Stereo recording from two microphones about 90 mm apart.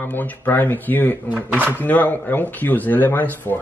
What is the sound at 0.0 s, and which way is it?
Speech, 20° left (ahead or behind).